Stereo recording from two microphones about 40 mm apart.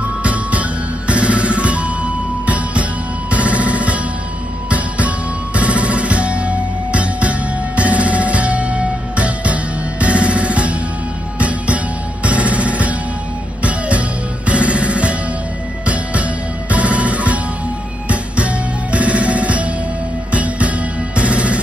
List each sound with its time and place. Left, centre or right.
0.2 s music: right
16.7 s music: right